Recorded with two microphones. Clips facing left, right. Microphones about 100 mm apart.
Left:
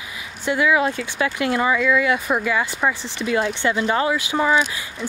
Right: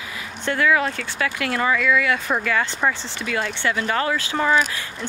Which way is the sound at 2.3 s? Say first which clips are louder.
Left 1 dB; 10° left (ahead or behind).